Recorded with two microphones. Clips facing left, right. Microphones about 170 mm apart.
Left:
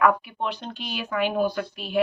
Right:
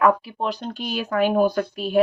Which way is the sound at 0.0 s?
30° right (ahead or behind).